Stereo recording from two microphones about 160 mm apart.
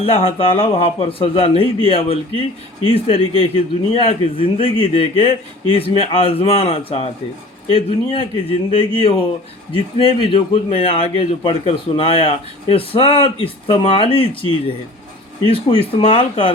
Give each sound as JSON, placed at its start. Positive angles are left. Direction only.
{"t": 0.0, "sound": "a man's voice", "side_deg": 40}